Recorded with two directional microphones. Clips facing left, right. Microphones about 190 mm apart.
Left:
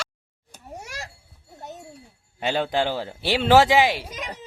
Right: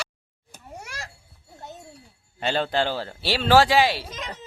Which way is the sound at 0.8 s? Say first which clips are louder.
Left 1 dB; 20° left (ahead or behind).